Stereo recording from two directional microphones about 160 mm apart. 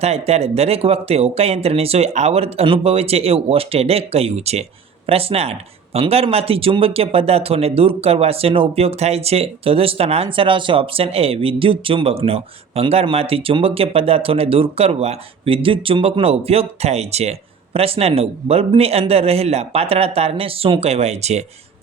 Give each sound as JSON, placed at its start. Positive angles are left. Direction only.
{"t": 0.0, "sound": "speech", "side_deg": -40}